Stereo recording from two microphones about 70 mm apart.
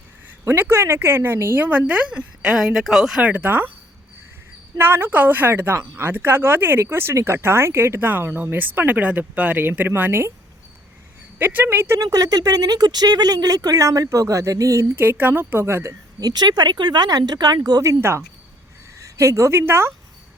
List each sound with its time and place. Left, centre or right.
0.4 s speech: right; by 3.2 s centre
3.2 s speech: right
4.8 s speech: right
11.3 s speech: right
11.9 s speech: right
15.2 s speech: right
16.2 s speech: right
18.9 s speech: right